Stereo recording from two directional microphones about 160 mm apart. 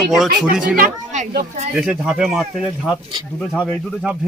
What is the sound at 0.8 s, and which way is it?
Speech, 55° right (ahead or behind).